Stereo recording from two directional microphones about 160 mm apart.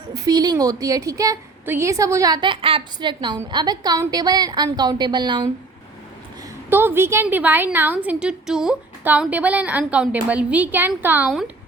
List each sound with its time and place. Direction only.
0.1 s a woman's voice: 25° right (ahead or behind)
6.7 s a woman's voice: 15° right (ahead or behind)